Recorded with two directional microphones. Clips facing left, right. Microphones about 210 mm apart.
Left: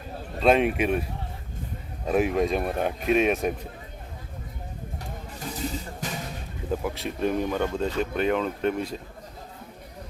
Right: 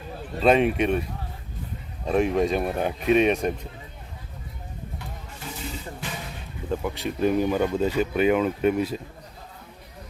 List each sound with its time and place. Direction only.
0.4 s speech: centre (ahead or behind)
2.0 s speech: 5° left (ahead or behind)
6.0 s a sound: 40° left (ahead or behind)
6.7 s speech: centre (ahead or behind)